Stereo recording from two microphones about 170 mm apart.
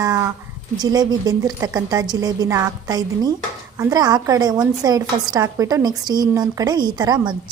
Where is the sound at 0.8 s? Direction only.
20° right (ahead or behind).